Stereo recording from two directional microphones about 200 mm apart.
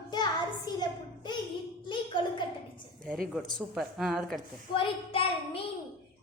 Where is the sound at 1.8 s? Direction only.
25° left (ahead or behind).